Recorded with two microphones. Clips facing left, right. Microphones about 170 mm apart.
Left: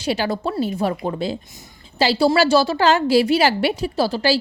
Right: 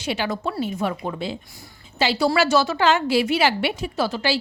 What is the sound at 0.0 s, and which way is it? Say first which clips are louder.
A woman's voice: left 3 dB; 35° left (ahead or behind).